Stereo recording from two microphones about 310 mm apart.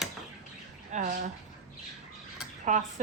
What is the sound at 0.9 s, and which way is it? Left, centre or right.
Speech, right.